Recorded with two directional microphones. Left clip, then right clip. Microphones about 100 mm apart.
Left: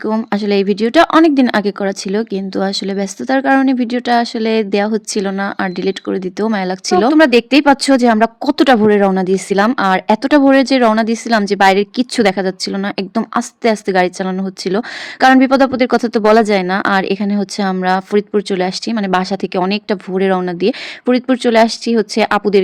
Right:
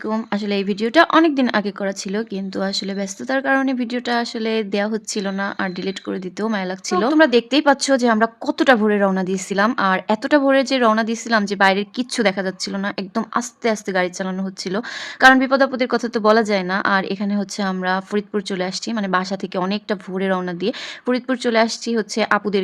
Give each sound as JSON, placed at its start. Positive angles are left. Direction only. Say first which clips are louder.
{"t": 0.3, "sound": "speech", "louder": "left 8 dB", "side_deg": 35}